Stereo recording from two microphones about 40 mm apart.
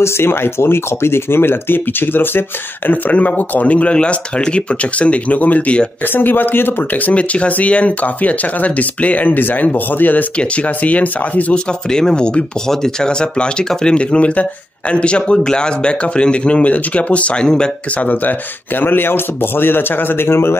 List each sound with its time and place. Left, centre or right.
0.2 s speech: left
2.9 s speech: left
6.1 s a man's voice: left
7.1 s speech: left
10.5 s speech: left
11.5 s a man's voice: centre; by 17.3 s left
17.4 s a man's voice: left
18.0 s speech: left
18.8 s a man's voice: left